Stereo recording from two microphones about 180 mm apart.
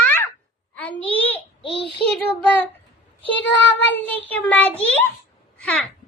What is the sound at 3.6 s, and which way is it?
Child singing, 90° left.